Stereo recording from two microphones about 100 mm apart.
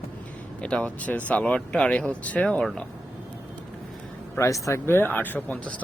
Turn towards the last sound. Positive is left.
turn(degrees=15)  # may be behind; listen again after turning